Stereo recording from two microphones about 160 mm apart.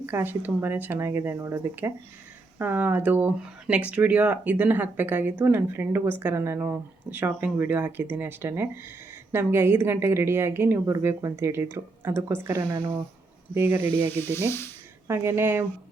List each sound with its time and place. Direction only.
0.0 s speech: 15° right (ahead or behind)
13.9 s speech: 10° left (ahead or behind)
15.0 s speech: 15° right (ahead or behind)